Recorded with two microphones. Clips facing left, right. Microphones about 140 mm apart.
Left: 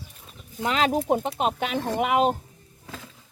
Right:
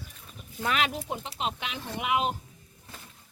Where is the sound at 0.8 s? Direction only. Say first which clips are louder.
Left 10 dB; 45° left (ahead or behind).